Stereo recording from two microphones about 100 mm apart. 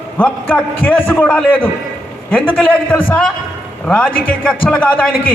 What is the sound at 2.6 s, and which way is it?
A man's voice, 15° left (ahead or behind).